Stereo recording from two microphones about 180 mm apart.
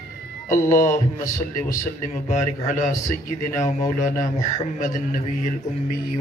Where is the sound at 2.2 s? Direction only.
45° left (ahead or behind).